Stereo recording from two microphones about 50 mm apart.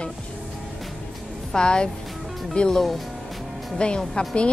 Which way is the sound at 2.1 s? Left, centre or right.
Centre.